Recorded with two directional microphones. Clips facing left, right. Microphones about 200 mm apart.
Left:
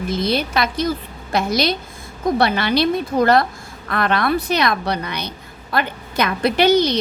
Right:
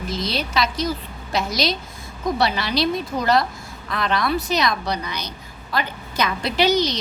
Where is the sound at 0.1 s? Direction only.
55° left (ahead or behind).